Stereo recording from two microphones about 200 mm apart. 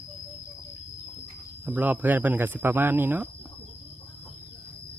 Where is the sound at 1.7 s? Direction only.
10° right (ahead or behind).